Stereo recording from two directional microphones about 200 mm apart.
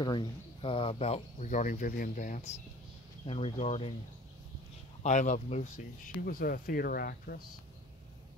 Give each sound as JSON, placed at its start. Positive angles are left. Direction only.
{"t": 0.0, "sound": "speech", "side_deg": 20}
{"t": 5.0, "sound": "speech", "side_deg": 35}
{"t": 6.2, "sound": "speech", "side_deg": 50}